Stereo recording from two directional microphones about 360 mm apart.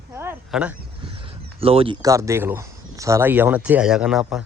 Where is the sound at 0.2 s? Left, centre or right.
Centre.